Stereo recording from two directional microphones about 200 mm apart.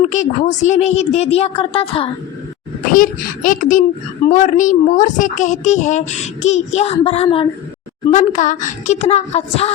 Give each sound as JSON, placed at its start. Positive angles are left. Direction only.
{"t": 0.1, "sound": "a child's voice", "side_deg": 35}
{"t": 2.9, "sound": "a child's voice", "side_deg": 45}